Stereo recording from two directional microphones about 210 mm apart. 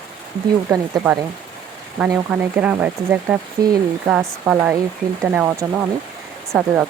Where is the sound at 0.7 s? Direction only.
15° right (ahead or behind).